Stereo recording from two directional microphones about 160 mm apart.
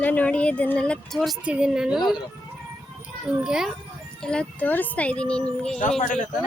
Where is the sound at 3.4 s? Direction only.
5° right (ahead or behind).